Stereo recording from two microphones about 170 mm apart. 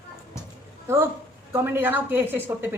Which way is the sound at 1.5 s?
15° right (ahead or behind).